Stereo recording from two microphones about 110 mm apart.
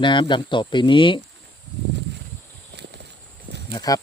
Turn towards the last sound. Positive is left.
turn(degrees=35)  # may be behind; listen again after turning